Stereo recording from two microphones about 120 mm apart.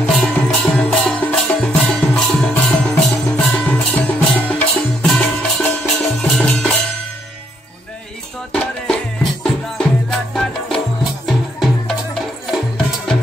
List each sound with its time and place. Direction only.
0.0 s music: 5° left (ahead or behind)
5.0 s music: 5° left (ahead or behind)
8.5 s music: 5° left (ahead or behind)